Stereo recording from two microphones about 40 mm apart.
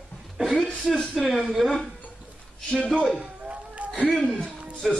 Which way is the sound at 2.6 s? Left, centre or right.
Left.